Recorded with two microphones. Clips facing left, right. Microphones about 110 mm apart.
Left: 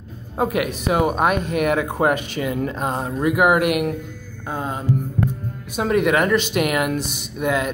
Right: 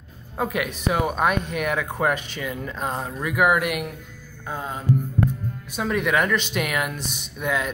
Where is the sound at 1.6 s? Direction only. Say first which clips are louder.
Left 8 dB; 10° left (ahead or behind).